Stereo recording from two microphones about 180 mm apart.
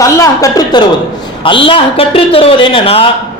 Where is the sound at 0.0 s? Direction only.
20° left (ahead or behind).